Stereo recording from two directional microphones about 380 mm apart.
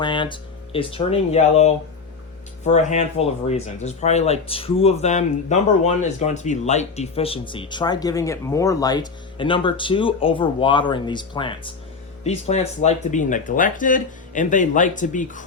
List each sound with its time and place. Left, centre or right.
0.0 s speech: centre